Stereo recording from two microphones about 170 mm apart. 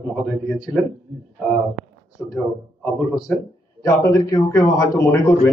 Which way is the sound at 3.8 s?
20° left (ahead or behind).